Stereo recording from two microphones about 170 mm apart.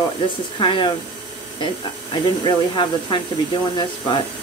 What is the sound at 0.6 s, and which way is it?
Speech, 30° left (ahead or behind).